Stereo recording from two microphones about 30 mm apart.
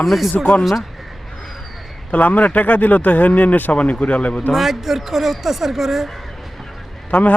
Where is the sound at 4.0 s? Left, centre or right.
Left.